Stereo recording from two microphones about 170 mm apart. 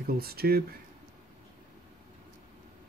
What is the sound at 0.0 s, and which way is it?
Speech, 65° right (ahead or behind).